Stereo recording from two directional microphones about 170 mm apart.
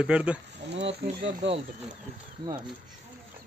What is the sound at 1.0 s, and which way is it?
Speech, 85° right.